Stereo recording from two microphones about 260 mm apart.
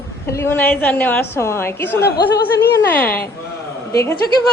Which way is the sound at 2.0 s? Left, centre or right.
Left.